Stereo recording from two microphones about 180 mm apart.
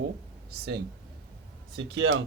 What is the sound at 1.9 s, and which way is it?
Speech, 90° right.